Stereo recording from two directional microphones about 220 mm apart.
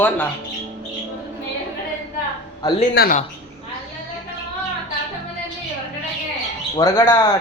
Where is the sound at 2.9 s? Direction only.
45° left (ahead or behind).